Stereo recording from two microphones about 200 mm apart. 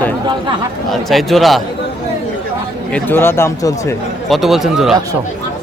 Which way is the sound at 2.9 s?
10° left (ahead or behind).